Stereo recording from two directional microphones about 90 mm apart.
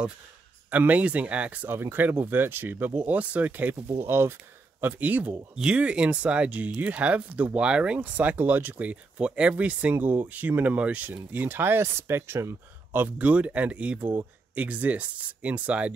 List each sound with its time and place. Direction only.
0.7 s speech: 15° right (ahead or behind)